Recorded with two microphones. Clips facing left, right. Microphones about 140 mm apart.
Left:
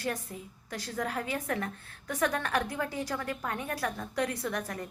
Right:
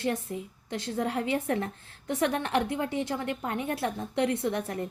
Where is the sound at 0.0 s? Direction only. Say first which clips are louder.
Right 5 dB; 25° right (ahead or behind).